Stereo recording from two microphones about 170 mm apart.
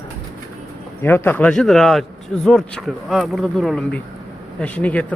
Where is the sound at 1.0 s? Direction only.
10° left (ahead or behind).